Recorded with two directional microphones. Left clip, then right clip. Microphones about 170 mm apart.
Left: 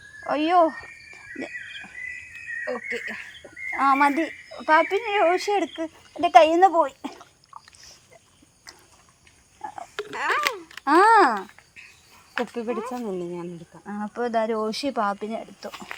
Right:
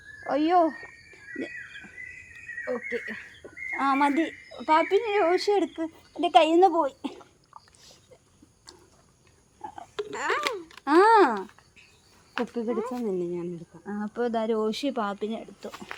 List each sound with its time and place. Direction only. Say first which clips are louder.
0.3 s speech: left 3 dB; 25° left (ahead or behind)
2.6 s speech: even; 5° right (ahead or behind)
3.8 s speech: left 4 dB; 25° left (ahead or behind)
7.5 s a sound: left 5 dB; 35° right (ahead or behind)
9.6 s a sound: left 2 dB; 25° left (ahead or behind)
10.8 s a child's voice: left 3 dB; 30° left (ahead or behind)
12.3 s speech: left 2 dB; centre (ahead or behind)
12.9 s speech: right 1 dB; 10° left (ahead or behind)
13.8 s speech: left 1 dB; 30° left (ahead or behind)